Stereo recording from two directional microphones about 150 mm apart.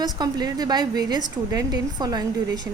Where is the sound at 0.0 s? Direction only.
25° right (ahead or behind).